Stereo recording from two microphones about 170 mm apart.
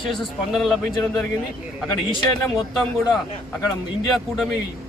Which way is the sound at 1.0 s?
10° left (ahead or behind).